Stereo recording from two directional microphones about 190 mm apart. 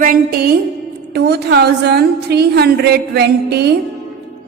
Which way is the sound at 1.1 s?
60° right (ahead or behind).